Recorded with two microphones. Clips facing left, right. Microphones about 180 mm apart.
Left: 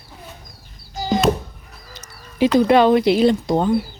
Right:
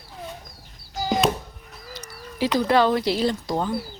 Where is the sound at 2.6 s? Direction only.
20° left (ahead or behind).